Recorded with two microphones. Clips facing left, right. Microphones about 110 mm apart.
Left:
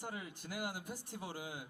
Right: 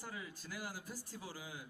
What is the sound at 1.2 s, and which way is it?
Speech, 60° left (ahead or behind).